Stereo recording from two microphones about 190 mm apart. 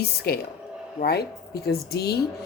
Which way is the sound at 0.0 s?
55° left (ahead or behind).